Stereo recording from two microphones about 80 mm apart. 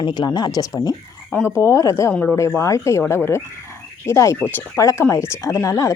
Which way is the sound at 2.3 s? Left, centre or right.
Left.